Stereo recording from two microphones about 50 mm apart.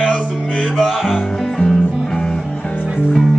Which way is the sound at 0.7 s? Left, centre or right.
Centre.